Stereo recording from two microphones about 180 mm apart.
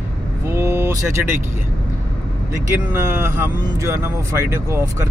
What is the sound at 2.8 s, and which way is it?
Speech, 10° right (ahead or behind).